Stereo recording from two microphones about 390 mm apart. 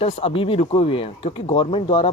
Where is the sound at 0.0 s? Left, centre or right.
Centre.